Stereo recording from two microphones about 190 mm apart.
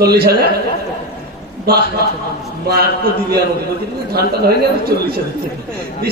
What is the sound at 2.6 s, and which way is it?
Speech, 55° right (ahead or behind).